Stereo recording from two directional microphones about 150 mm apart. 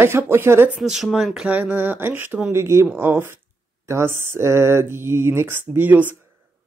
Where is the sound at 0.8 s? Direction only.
Centre (ahead or behind).